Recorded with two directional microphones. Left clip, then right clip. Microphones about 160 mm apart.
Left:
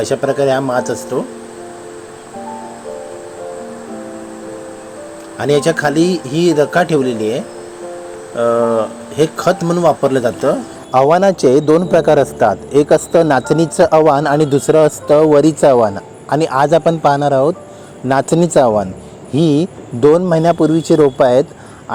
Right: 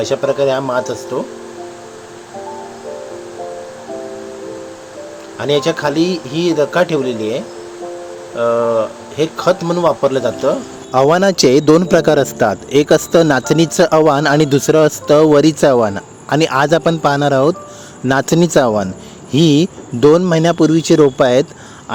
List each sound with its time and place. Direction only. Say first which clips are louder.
0.0 s speech: even; 20° left (ahead or behind)
5.4 s speech: left 2 dB; 20° left (ahead or behind)
10.9 s a man's voice: left 1 dB; 20° right (ahead or behind)
11.2 s a man's voice: even; 30° right (ahead or behind)